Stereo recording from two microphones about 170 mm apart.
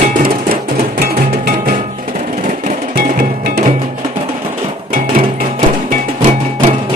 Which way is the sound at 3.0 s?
65° right (ahead or behind).